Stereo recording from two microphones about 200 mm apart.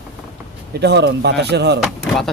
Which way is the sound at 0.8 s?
55° right (ahead or behind).